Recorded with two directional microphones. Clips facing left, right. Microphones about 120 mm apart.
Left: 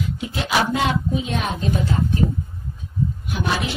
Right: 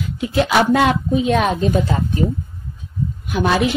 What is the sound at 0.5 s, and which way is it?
Speech, 60° right (ahead or behind).